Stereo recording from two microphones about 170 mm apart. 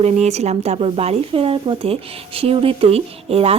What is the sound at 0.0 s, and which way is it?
Speech, 40° right (ahead or behind).